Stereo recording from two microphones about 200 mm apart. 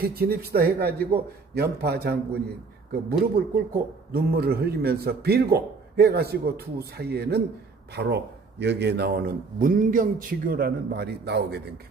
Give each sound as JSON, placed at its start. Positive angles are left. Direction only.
{"t": 0.0, "sound": "a man's voice", "side_deg": -50}